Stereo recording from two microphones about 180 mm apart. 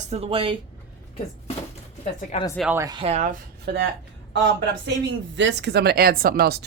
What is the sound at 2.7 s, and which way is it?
Speech, 15° right (ahead or behind).